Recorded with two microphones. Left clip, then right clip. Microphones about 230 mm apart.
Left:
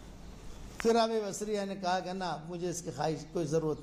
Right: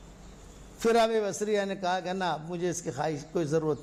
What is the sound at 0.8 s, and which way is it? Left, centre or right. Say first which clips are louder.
A man's voice: right 4 dB; right.